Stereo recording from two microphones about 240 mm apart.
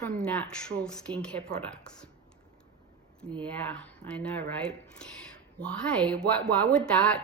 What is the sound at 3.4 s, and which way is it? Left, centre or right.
A woman's voice, centre.